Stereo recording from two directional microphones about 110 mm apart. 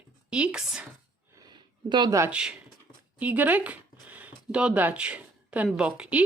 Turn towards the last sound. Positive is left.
turn(degrees=-10)  # may be behind; listen again after turning